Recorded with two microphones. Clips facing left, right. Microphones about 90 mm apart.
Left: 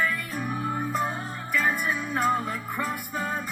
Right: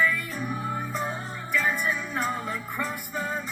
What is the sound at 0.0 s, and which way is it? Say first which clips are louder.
Music: right 2 dB; 45° left (ahead or behind).